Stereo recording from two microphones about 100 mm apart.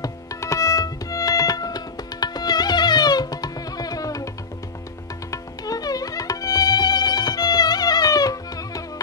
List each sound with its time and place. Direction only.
0.0 s music: 35° left (ahead or behind)
5.3 s music: 40° left (ahead or behind)